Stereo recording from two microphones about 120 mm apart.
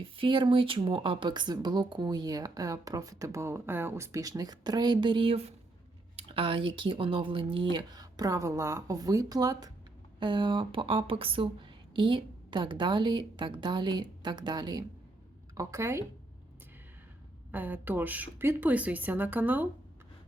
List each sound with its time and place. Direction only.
0.0 s speech: 45° right (ahead or behind)
15.5 s speech: 25° right (ahead or behind)
17.5 s speech: 15° right (ahead or behind)